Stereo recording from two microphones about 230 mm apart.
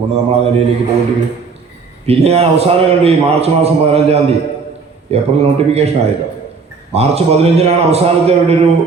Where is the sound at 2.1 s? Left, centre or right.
Right.